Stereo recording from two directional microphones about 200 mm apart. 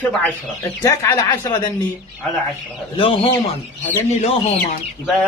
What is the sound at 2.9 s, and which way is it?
Speech, 25° left (ahead or behind).